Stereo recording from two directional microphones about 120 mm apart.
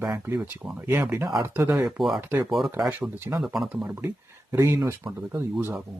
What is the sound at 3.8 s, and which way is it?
Speech, 15° right (ahead or behind).